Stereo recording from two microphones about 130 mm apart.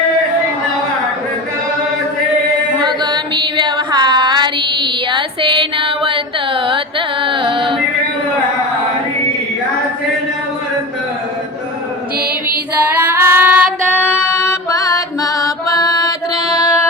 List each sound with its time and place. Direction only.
2.8 s child singing: 35° right (ahead or behind)
12.8 s female singing: 15° right (ahead or behind)
13.9 s music: 15° left (ahead or behind)